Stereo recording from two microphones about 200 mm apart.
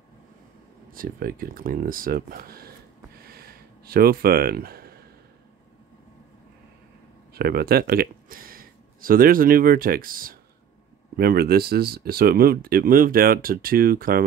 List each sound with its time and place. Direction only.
0.9 s speech: 45° right (ahead or behind)
3.3 s a sound: 50° right (ahead or behind)
7.3 s speech: 50° right (ahead or behind)